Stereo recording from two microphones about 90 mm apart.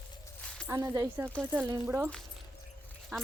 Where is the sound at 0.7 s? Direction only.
35° right (ahead or behind).